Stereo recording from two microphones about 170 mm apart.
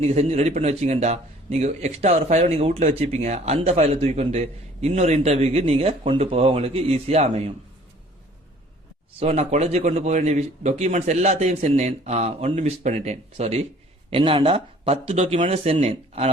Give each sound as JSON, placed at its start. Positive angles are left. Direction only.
{"t": 0.0, "sound": "a man's voice", "side_deg": -40}
{"t": 9.1, "sound": "a man's voice", "side_deg": -40}